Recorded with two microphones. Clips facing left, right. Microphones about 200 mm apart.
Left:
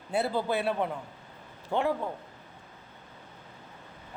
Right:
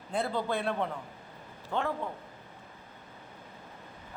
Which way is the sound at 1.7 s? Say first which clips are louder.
Left 4 dB; 20° left (ahead or behind).